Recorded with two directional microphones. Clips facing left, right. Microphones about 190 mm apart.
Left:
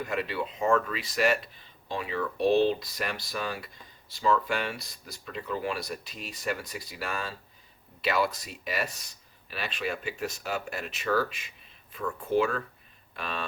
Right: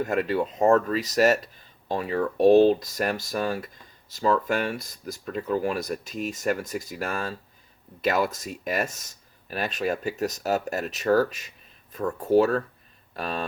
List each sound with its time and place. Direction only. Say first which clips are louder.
0.0 s speech: right 7 dB; 45° right (ahead or behind)